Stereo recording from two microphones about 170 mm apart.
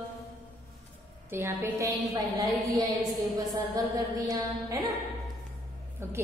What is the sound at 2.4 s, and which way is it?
Music, 20° right (ahead or behind).